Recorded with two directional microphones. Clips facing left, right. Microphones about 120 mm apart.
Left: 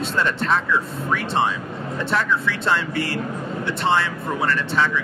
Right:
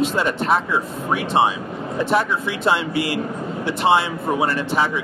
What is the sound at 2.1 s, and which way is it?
A man's voice, 15° right (ahead or behind).